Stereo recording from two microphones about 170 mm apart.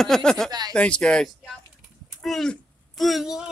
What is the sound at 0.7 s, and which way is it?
Speech, 5° left (ahead or behind).